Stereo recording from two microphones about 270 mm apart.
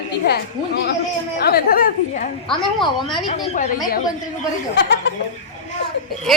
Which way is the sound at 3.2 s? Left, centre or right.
Left.